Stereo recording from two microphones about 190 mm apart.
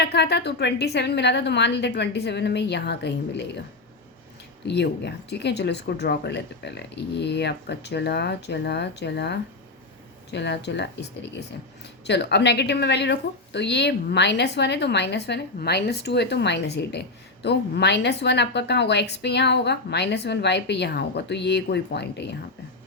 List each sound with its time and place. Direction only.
0.0 s speech: 60° left (ahead or behind)
4.6 s speech: 65° left (ahead or behind)